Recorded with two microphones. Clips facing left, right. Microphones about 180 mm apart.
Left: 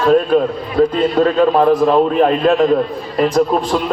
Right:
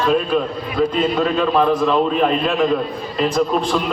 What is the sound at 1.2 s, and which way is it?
Speech, 45° left (ahead or behind).